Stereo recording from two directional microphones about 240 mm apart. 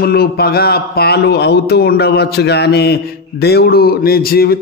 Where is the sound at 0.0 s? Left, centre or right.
Left.